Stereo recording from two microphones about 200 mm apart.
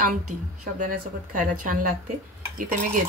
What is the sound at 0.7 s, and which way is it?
Speech, 40° right (ahead or behind).